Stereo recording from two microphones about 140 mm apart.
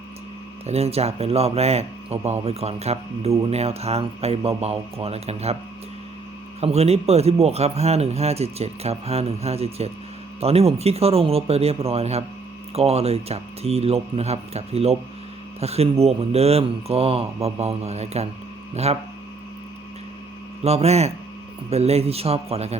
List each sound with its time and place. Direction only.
0.7 s speech: 45° right (ahead or behind)
6.6 s speech: 50° right (ahead or behind)
20.7 s speech: 50° right (ahead or behind)